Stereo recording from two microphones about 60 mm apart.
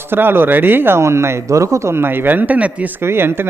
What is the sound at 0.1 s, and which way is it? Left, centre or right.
Speech, right.